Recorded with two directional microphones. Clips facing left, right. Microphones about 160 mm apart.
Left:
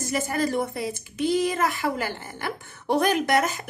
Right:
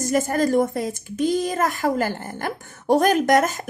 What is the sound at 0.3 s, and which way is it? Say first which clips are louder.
A woman's voice: right 5 dB; 45° right (ahead or behind).